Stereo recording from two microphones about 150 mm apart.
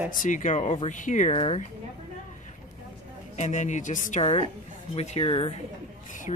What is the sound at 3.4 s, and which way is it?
A woman's voice, 55° left (ahead or behind).